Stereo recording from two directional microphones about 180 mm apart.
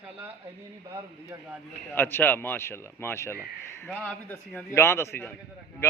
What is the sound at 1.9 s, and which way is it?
A man's voice, 10° left (ahead or behind).